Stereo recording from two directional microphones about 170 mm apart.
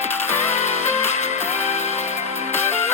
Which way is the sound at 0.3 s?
40° left (ahead or behind).